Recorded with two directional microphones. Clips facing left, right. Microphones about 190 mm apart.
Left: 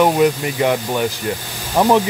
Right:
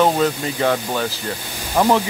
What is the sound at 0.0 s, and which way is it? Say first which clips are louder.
Speech: left 3 dB; 15° left (ahead or behind).